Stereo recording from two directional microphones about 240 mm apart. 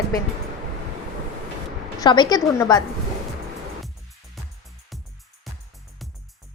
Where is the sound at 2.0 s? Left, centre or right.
Centre.